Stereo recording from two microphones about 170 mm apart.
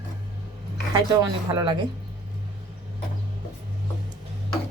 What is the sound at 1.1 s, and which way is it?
Speech, 25° right (ahead or behind).